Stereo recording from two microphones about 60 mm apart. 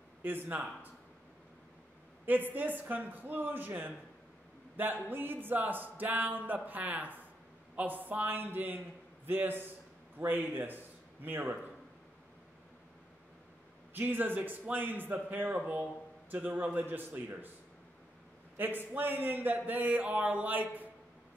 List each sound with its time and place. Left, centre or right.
0.2 s a man's voice: right
2.2 s speech: right
13.9 s a man's voice: right
18.6 s speech: right